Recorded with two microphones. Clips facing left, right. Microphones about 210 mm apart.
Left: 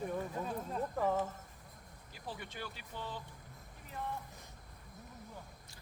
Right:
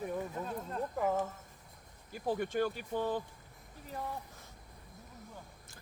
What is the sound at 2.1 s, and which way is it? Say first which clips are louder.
Speech: right 13 dB; 50° right (ahead or behind).